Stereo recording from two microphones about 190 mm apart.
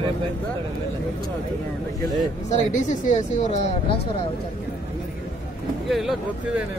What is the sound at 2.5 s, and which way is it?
Speech, 40° left (ahead or behind).